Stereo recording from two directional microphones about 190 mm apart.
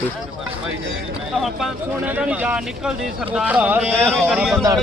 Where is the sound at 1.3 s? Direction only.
Centre (ahead or behind).